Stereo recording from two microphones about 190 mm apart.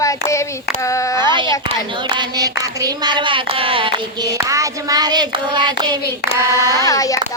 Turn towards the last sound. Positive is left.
turn(degrees=20)  # may be behind; listen again after turning